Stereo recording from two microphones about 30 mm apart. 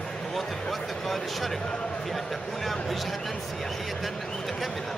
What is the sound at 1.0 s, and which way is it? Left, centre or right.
Speech, centre.